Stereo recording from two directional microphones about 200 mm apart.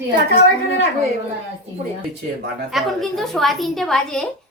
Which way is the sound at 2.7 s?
Centre (ahead or behind).